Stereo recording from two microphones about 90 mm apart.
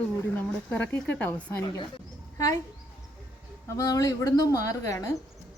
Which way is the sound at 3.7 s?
40° left (ahead or behind).